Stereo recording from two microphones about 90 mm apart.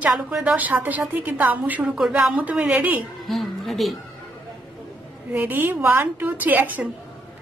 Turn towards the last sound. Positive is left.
turn(degrees=-20)  # may be behind; listen again after turning